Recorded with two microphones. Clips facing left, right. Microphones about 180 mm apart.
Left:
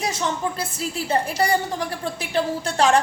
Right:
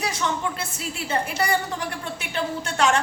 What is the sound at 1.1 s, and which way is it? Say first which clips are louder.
A woman's voice: left 3 dB; 35° left (ahead or behind).